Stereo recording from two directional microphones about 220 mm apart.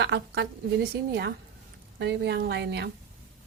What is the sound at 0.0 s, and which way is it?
A woman's voice, 50° right (ahead or behind).